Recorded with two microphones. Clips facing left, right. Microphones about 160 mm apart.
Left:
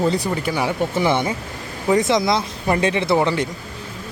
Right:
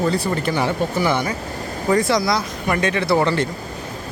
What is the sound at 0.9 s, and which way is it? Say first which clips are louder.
Speech: left 1 dB; 25° left (ahead or behind).